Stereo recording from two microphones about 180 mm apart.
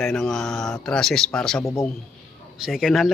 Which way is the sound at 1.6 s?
15° left (ahead or behind).